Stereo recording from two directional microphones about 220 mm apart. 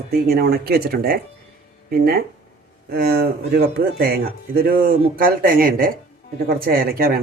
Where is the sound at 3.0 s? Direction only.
40° right (ahead or behind).